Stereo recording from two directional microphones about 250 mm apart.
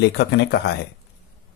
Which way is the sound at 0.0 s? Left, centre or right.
Left.